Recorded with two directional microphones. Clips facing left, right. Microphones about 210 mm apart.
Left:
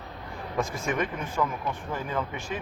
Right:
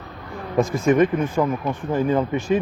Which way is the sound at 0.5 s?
35° right (ahead or behind).